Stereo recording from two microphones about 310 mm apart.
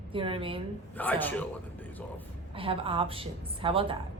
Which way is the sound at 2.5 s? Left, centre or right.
Centre.